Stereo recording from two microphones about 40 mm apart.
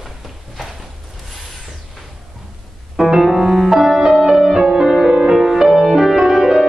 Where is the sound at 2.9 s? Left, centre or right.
Centre.